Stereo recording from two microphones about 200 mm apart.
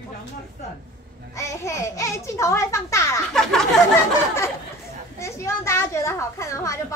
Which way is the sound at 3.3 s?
Centre (ahead or behind).